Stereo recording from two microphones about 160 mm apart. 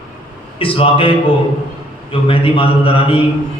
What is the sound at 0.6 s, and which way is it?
Speech, 35° left (ahead or behind).